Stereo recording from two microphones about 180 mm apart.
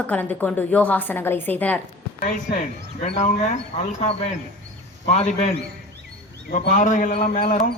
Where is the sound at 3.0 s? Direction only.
40° left (ahead or behind).